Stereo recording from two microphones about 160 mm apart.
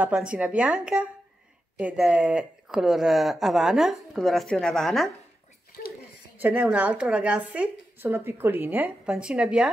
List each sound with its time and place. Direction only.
0.0 s a woman's voice: 5° right (ahead or behind)
5.7 s a sound: 70° left (ahead or behind)
6.3 s a woman's voice: 10° right (ahead or behind)